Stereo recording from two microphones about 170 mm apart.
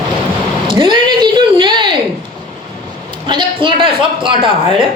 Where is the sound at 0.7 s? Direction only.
30° right (ahead or behind).